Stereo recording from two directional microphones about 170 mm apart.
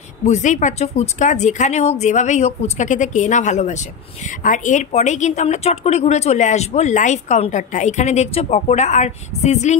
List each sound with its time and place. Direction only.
0.2 s speech: 45° left (ahead or behind)